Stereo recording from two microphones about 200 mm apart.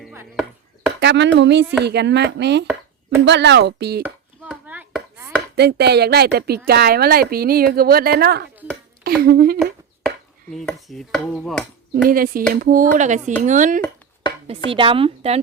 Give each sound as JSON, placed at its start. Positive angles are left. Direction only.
{"t": 0.1, "sound": "chop", "side_deg": -10}
{"t": 0.9, "sound": "speech", "side_deg": -60}
{"t": 4.0, "sound": "chopping", "side_deg": -10}
{"t": 5.5, "sound": "a woman's voice", "side_deg": -55}
{"t": 10.5, "sound": "a sound", "side_deg": 0}
{"t": 12.0, "sound": "a woman's voice", "side_deg": -45}
{"t": 14.7, "sound": "a woman's voice", "side_deg": -25}